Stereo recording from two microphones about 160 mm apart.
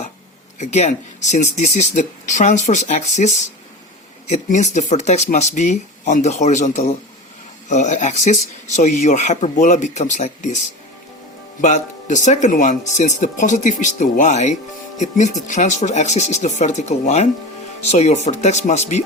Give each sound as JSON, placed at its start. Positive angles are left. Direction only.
{"t": 0.6, "sound": "speech", "side_deg": 45}
{"t": 11.6, "sound": "speech", "side_deg": 50}